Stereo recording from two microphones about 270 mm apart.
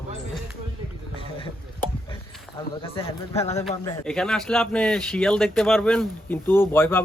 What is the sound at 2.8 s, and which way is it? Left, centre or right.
Speech, left.